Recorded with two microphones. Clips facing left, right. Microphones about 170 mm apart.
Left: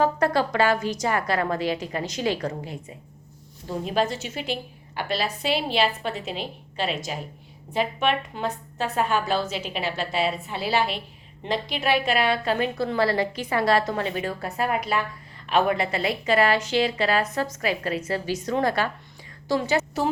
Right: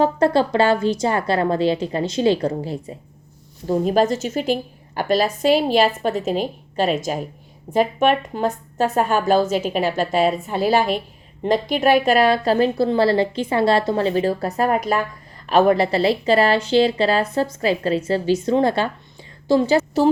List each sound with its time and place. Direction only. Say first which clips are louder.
0.0 s a woman's voice: right 5 dB; 30° right (ahead or behind)
3.7 s a woman's voice: right 8 dB; 45° right (ahead or behind)